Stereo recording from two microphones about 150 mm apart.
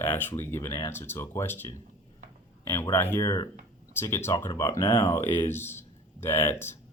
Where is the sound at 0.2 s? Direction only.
15° left (ahead or behind).